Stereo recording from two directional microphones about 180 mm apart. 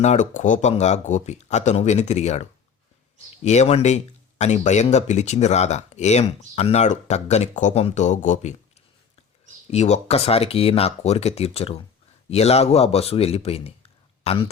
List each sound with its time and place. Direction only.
0.0 s speech: 40° left (ahead or behind)
9.6 s speech: 35° left (ahead or behind)